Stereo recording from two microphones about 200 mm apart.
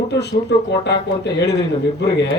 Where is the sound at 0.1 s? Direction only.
55° left (ahead or behind).